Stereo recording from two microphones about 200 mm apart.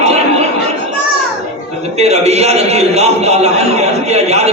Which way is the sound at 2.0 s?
35° right (ahead or behind).